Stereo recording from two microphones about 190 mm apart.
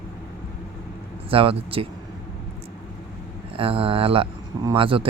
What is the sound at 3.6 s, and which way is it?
Speech, 30° right (ahead or behind).